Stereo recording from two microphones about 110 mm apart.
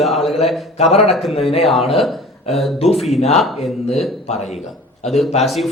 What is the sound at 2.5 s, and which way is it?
Speech, centre (ahead or behind).